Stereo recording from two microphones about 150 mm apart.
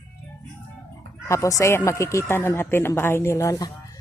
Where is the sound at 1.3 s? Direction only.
20° left (ahead or behind).